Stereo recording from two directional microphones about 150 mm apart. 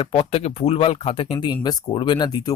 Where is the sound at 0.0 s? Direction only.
35° left (ahead or behind).